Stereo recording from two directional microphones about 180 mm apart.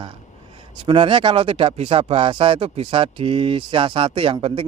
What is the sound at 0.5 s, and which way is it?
Speech, 30° right (ahead or behind).